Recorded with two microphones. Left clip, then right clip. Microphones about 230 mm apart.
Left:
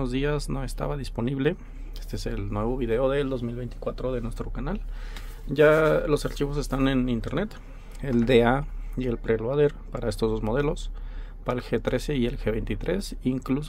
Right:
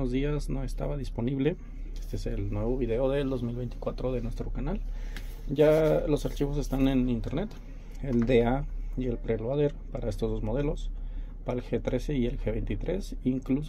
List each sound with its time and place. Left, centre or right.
0.0 s speech: left